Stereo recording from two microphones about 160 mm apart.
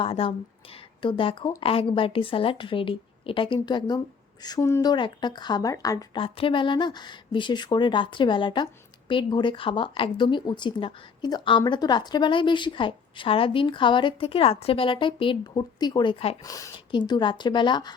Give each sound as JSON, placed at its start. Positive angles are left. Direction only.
{"t": 0.0, "sound": "speech", "side_deg": 35}
{"t": 6.2, "sound": "speech", "side_deg": 35}
{"t": 16.4, "sound": "speech", "side_deg": 20}